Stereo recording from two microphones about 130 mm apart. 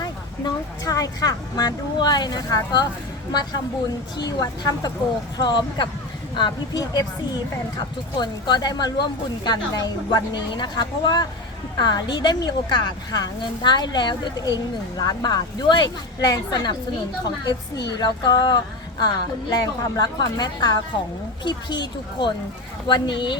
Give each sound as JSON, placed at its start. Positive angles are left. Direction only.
{"t": 0.0, "sound": "speech", "side_deg": 30}
{"t": 4.3, "sound": "a woman's voice", "side_deg": 30}
{"t": 18.0, "sound": "speech", "side_deg": 35}